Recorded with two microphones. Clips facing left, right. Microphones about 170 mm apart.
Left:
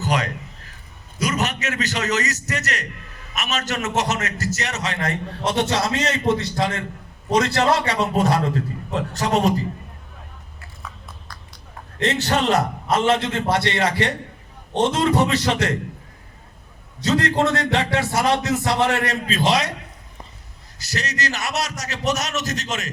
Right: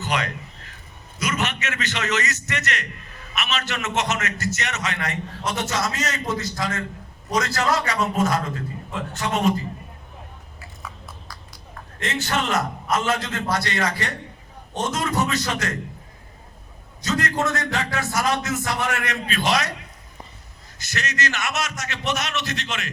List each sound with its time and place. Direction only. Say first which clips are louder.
0.0 s a man's voice: left 3 dB; 40° left (ahead or behind)
11.3 s a sound: even; 5° right (ahead or behind)
11.9 s a man's voice: left 5 dB; 35° left (ahead or behind)
17.0 s a man's voice: left 5 dB; 30° left (ahead or behind)
20.7 s a man's voice: left 1 dB; 35° left (ahead or behind)